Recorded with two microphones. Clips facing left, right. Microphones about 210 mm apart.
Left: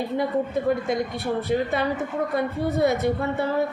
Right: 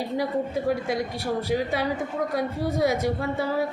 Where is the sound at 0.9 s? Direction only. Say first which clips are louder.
Left 2 dB; 10° right (ahead or behind).